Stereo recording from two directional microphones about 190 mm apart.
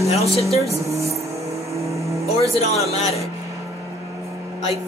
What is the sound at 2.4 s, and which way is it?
Speech, 35° left (ahead or behind).